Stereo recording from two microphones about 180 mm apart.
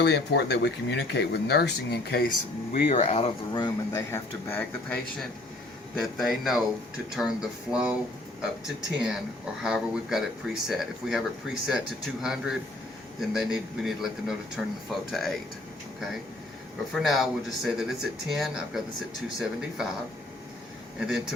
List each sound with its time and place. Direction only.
0.0 s speech: 70° left (ahead or behind)
2.7 s speech: 50° left (ahead or behind)
3.0 s speech: 35° left (ahead or behind)
3.6 s speech: 15° left (ahead or behind)
6.0 s speech: centre (ahead or behind)
16.9 s speech: centre (ahead or behind)
21.0 s speech: 5° right (ahead or behind)